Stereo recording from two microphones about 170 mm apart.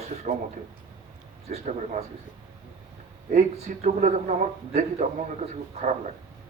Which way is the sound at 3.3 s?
45° right (ahead or behind).